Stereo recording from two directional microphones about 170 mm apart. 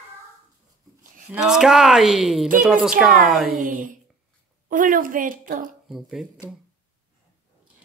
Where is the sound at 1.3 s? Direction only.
5° right (ahead or behind).